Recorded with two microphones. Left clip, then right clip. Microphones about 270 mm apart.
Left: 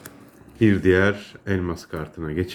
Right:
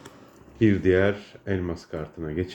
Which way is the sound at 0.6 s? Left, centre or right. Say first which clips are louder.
Left 3 dB; centre.